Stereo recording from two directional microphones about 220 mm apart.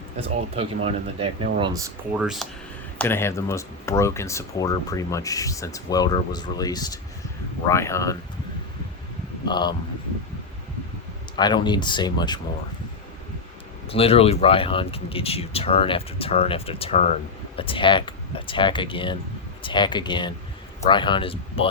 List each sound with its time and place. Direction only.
0.5 s speech: 25° right (ahead or behind)
2.1 s speech: centre (ahead or behind)
3.0 s speech: 10° left (ahead or behind)
9.5 s speech: 20° left (ahead or behind)
11.3 s speech: 20° left (ahead or behind)
13.9 s speech: 25° left (ahead or behind)